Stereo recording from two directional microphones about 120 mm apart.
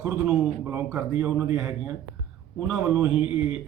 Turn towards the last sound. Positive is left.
turn(degrees=-10)  # may be behind; listen again after turning